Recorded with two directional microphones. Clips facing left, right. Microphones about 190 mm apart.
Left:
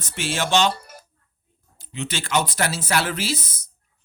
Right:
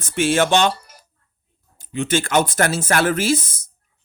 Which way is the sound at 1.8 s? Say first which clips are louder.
Right 9 dB; 50° right (ahead or behind).